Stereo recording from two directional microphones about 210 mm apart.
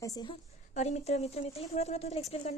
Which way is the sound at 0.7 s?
35° left (ahead or behind).